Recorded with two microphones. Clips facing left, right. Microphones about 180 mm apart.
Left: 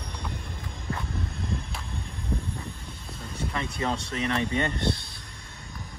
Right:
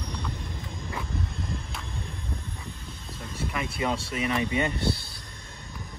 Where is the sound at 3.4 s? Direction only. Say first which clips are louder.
Even; 10° right (ahead or behind).